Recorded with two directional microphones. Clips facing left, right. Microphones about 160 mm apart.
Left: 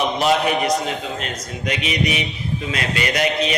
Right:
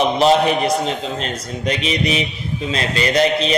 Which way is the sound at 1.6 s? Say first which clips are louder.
Right 2 dB; 30° right (ahead or behind).